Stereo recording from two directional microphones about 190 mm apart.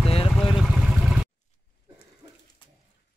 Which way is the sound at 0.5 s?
Centre (ahead or behind).